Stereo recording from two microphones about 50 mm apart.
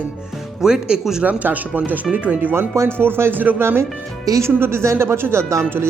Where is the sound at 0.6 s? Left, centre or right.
Centre.